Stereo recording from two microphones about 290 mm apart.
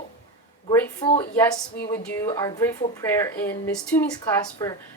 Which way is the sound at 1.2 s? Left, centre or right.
Centre.